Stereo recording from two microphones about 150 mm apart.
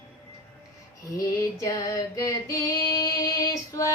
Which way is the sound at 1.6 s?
20° left (ahead or behind).